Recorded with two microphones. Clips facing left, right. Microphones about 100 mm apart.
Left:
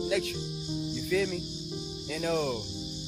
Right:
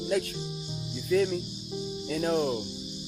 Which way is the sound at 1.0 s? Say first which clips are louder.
Right 4 dB; 35° right (ahead or behind).